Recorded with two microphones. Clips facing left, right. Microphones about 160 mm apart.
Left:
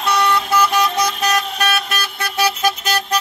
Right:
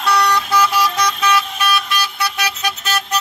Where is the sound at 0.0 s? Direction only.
20° left (ahead or behind).